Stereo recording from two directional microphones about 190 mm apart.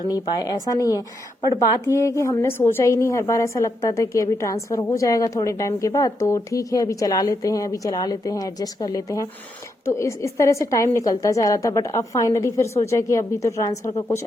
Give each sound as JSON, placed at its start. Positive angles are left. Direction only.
{"t": 0.1, "sound": "a woman's voice", "side_deg": 20}